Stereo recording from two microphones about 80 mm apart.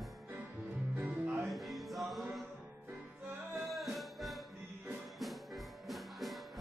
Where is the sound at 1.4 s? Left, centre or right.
Centre.